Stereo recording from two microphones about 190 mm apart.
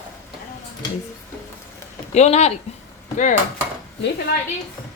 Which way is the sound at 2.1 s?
35° left (ahead or behind).